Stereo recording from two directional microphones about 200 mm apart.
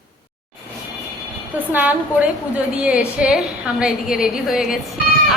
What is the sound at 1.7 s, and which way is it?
A woman's voice, 10° right (ahead or behind).